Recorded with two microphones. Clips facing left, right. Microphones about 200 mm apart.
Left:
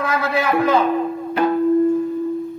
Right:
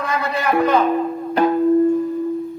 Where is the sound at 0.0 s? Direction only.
5° left (ahead or behind).